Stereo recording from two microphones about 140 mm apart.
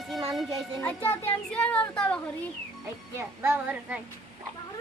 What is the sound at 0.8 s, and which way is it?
Speech, 15° left (ahead or behind).